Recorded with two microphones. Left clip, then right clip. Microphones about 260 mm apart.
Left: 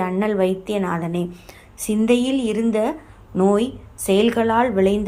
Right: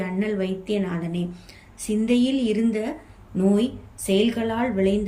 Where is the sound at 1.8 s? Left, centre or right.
Centre.